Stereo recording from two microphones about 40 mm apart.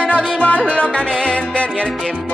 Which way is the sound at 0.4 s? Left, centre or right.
Left.